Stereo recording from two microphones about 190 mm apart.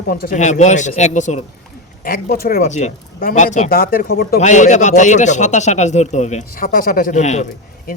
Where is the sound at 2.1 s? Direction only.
50° left (ahead or behind).